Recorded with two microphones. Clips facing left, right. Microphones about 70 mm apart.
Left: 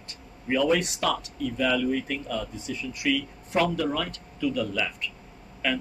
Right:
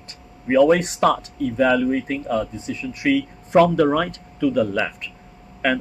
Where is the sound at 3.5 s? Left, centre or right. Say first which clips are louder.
Right 10 dB; right.